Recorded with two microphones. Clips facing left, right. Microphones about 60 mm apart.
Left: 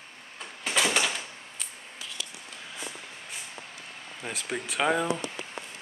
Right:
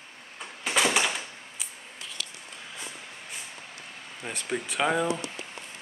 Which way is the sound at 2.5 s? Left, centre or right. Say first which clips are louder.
Left 1 dB; centre.